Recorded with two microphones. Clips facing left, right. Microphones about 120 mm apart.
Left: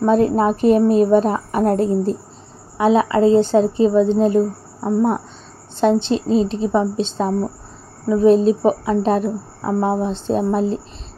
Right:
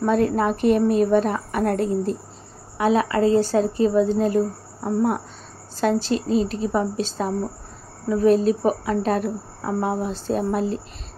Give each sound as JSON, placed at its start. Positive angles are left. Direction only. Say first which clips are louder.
{"t": 0.0, "sound": "a woman's voice", "louder": "left 4 dB", "side_deg": 30}
{"t": 5.8, "sound": "a woman's voice", "louder": "left 5 dB", "side_deg": 25}